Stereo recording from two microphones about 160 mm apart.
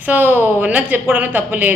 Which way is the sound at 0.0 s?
10° right (ahead or behind).